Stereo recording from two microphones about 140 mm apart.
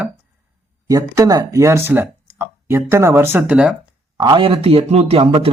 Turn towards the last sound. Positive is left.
turn(degrees=-40)  # may be behind; listen again after turning